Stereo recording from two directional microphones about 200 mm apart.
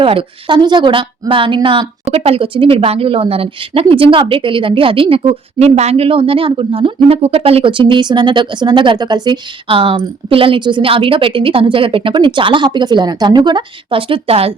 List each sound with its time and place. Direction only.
0.0 s a woman's voice: 25° right (ahead or behind)